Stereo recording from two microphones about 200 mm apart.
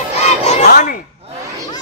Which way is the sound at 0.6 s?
45° left (ahead or behind).